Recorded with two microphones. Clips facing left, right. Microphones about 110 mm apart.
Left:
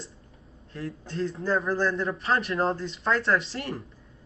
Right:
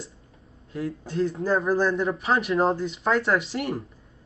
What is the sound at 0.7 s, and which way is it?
A man's voice, 5° right (ahead or behind).